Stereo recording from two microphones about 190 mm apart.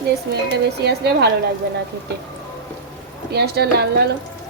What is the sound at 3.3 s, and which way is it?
Speech, 60° right (ahead or behind).